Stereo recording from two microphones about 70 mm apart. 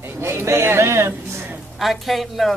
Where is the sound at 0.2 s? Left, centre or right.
Right.